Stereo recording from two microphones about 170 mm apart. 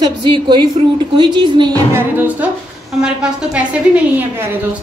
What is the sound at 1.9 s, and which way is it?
A woman's voice, 10° right (ahead or behind).